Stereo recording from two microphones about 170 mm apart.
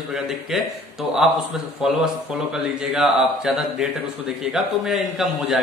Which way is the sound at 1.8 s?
5° right (ahead or behind).